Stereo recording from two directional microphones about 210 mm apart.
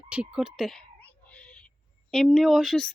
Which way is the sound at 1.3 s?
5° left (ahead or behind).